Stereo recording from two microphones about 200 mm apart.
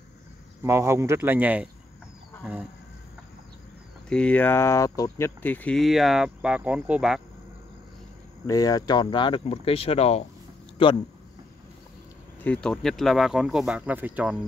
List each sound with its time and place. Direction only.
0.7 s speech: 15° right (ahead or behind)
4.1 s speech: 5° left (ahead or behind)
8.5 s speech: 20° left (ahead or behind)
12.4 s speech: 5° left (ahead or behind)